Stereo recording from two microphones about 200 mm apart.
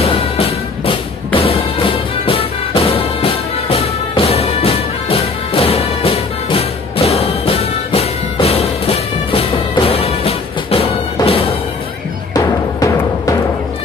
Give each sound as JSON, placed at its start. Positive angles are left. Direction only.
{"t": 0.0, "sound": "music", "side_deg": 30}
{"t": 12.4, "sound": "timpani", "side_deg": 15}